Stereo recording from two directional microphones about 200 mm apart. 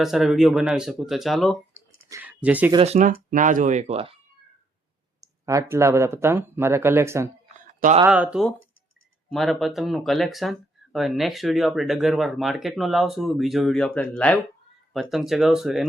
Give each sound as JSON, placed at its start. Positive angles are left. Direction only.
{"t": 0.0, "sound": "speech", "side_deg": 0}
{"t": 2.7, "sound": "speech", "side_deg": -30}
{"t": 5.2, "sound": "speech", "side_deg": -15}